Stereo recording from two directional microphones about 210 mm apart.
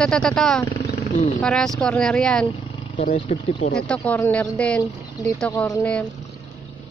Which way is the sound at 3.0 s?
30° left (ahead or behind).